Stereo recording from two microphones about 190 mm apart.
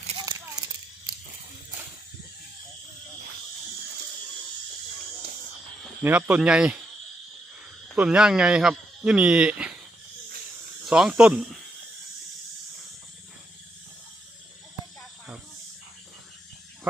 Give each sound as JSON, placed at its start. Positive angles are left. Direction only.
{"t": 0.2, "sound": "a sound", "side_deg": -20}
{"t": 6.0, "sound": "speech", "side_deg": -10}
{"t": 7.9, "sound": "speech", "side_deg": -5}
{"t": 10.8, "sound": "speech", "side_deg": -5}